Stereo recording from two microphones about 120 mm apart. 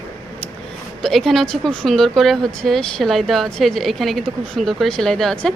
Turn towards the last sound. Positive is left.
turn(degrees=5)  # may be behind; listen again after turning